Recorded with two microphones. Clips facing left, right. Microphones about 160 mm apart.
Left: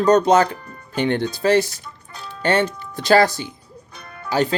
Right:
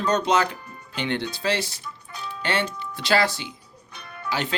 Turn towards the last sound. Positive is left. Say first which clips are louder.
# left 8 dB
turn(degrees=40)  # may be behind; listen again after turning